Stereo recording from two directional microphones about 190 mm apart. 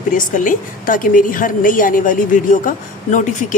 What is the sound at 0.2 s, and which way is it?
A woman's voice, 45° left (ahead or behind).